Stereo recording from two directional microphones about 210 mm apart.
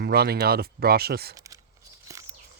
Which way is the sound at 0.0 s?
50° right (ahead or behind).